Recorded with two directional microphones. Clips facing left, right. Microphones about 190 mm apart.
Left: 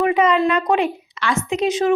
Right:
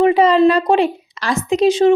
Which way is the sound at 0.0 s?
30° right (ahead or behind).